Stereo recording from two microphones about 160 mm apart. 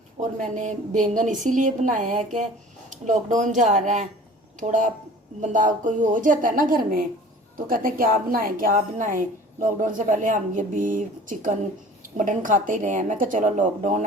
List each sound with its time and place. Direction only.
0.5 s a woman's voice: 50° right (ahead or behind)